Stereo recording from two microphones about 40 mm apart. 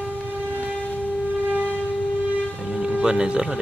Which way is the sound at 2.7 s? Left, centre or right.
Centre.